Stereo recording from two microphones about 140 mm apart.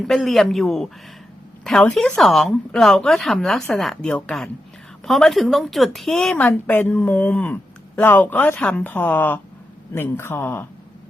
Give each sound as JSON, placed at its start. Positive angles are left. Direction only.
{"t": 0.1, "sound": "a woman's voice", "side_deg": 0}